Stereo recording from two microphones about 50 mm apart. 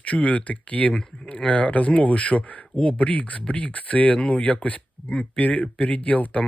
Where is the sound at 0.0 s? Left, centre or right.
Left.